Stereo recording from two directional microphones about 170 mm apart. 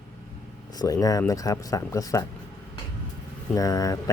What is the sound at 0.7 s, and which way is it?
Speech, 20° left (ahead or behind).